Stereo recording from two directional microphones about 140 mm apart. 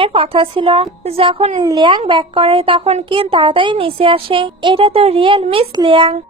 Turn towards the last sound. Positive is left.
turn(degrees=-35)  # may be behind; listen again after turning